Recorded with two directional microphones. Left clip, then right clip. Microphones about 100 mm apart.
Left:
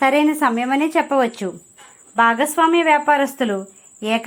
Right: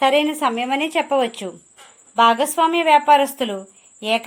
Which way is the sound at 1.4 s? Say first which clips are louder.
Left 4 dB; 20° right (ahead or behind).